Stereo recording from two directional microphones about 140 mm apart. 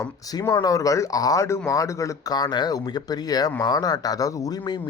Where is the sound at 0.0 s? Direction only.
25° left (ahead or behind).